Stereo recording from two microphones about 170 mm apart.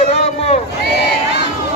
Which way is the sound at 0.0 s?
40° left (ahead or behind).